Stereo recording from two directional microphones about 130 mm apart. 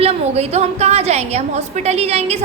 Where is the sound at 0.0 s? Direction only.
55° right (ahead or behind).